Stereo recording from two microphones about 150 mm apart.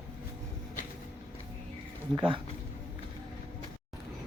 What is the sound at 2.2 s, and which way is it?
Speech, 35° right (ahead or behind).